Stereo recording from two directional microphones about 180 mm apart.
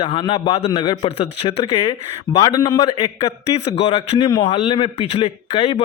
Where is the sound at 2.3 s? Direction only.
20° left (ahead or behind).